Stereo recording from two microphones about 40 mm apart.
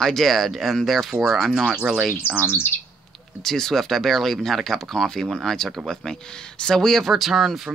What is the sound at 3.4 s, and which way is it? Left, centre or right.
Speech, centre.